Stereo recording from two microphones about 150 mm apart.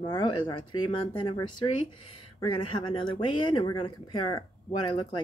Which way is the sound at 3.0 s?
30° left (ahead or behind).